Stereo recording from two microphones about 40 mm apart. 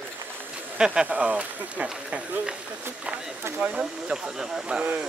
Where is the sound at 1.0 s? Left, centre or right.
Right.